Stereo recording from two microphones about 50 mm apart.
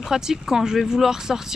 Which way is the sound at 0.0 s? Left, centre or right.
Centre.